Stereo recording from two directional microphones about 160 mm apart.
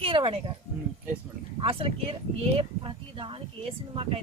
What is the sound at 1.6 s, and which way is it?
Speech, 35° right (ahead or behind).